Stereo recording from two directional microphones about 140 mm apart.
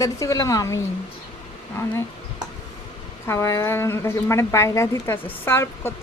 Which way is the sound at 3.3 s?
20° left (ahead or behind).